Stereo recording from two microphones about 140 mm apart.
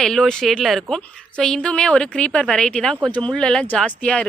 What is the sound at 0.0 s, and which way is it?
A woman's voice, 5° left (ahead or behind).